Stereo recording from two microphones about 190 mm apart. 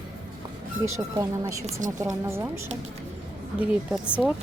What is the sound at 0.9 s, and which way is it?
Speech, 15° right (ahead or behind).